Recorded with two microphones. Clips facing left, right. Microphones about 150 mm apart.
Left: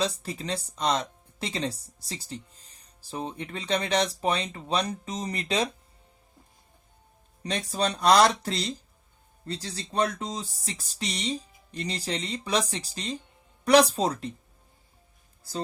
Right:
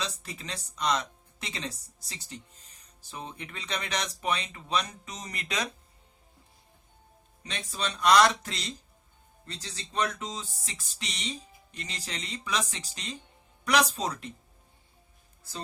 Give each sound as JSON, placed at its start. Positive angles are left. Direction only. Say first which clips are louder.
{"t": 0.0, "sound": "speech", "louder": "left 8 dB", "side_deg": 35}
{"t": 7.4, "sound": "speech", "louder": "left 7 dB", "side_deg": 40}